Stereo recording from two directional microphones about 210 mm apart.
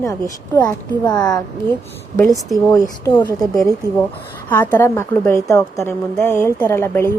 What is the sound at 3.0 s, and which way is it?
Speech, 20° left (ahead or behind).